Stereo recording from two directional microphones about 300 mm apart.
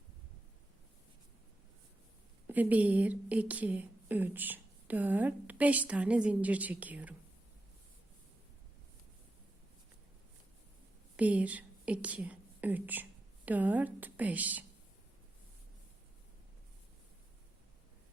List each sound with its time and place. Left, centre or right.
2.5 s a woman's voice: centre
11.2 s speech: centre